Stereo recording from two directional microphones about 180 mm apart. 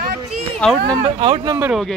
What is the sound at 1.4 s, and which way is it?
Speech, 15° right (ahead or behind).